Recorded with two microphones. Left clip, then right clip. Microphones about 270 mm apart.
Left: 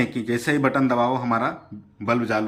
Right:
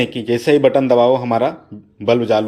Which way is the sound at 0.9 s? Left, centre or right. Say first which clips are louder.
Right 9 dB; centre.